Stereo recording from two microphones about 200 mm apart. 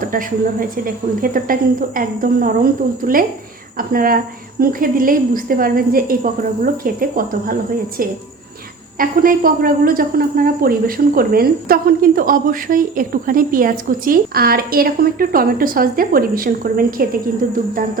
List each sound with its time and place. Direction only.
0.1 s a woman's voice: 45° right (ahead or behind)
9.0 s a woman's voice: 45° right (ahead or behind)